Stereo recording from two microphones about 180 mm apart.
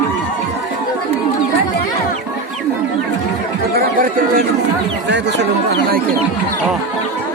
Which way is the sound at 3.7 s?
55° right (ahead or behind).